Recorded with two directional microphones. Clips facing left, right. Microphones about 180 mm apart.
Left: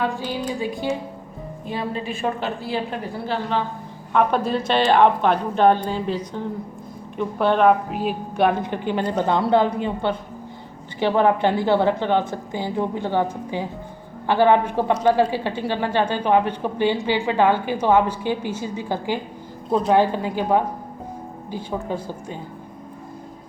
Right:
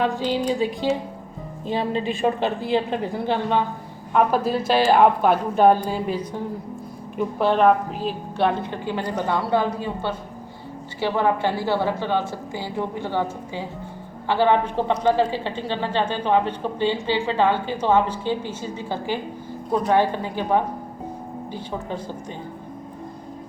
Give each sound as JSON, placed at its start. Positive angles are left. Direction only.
{"t": 0.3, "sound": "a woman's voice", "side_deg": -20}
{"t": 4.1, "sound": "a woman's voice", "side_deg": -5}
{"t": 7.9, "sound": "a woman's voice", "side_deg": 10}